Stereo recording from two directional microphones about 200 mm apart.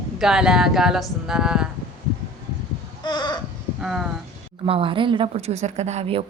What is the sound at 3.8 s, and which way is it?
Speech, centre (ahead or behind).